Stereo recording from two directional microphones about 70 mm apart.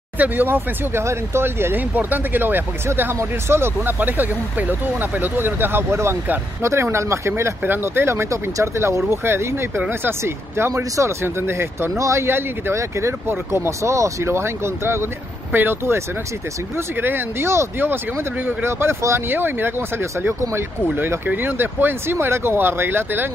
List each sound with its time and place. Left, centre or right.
0.2 s speech: right